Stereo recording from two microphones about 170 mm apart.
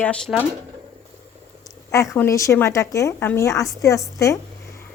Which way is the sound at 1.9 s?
15° left (ahead or behind).